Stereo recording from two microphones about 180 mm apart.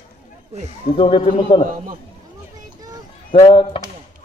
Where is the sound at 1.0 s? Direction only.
30° left (ahead or behind).